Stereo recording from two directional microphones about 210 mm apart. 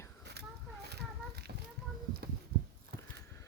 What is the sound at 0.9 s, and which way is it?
Child singing, 50° right (ahead or behind).